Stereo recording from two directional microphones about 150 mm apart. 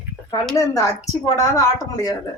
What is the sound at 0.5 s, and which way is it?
Speech, 20° left (ahead or behind).